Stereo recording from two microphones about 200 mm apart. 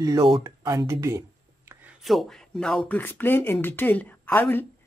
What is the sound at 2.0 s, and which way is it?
Speech, centre (ahead or behind).